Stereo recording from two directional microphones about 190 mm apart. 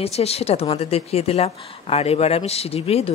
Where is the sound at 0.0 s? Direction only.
30° left (ahead or behind).